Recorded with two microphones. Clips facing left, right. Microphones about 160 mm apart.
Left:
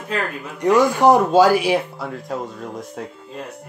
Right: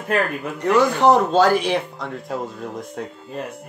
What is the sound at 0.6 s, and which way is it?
Speech, 15° left (ahead or behind).